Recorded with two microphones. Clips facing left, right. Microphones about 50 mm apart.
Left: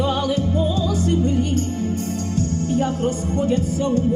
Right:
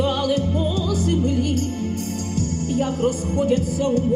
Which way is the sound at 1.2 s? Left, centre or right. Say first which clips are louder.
Left 1 dB; right.